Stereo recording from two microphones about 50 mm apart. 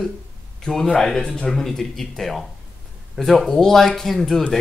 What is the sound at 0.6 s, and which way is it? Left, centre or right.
Speech, centre.